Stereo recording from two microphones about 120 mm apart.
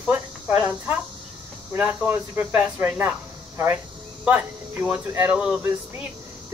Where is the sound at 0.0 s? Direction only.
10° right (ahead or behind).